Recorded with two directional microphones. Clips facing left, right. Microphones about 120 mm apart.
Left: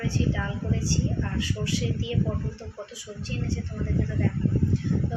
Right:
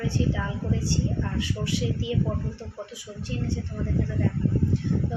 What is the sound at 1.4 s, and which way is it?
Speech, 20° right (ahead or behind).